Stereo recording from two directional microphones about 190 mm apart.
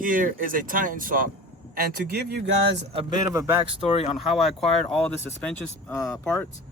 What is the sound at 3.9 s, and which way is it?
Speech, 30° left (ahead or behind).